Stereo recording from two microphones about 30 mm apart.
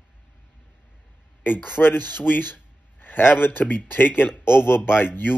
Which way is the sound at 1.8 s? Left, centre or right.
Left.